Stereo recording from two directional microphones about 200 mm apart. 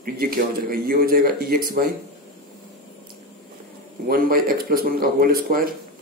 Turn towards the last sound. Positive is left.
turn(degrees=-45)  # may be behind; listen again after turning